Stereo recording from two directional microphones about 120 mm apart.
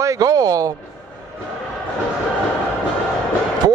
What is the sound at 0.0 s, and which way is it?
Speech, 30° right (ahead or behind).